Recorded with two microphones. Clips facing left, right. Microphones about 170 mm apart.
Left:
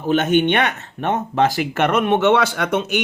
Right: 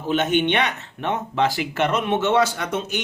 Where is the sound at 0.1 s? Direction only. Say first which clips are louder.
Left 4 dB; 50° left (ahead or behind).